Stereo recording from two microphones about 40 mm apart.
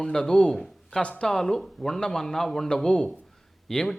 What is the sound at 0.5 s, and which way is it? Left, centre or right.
A man's voice, centre.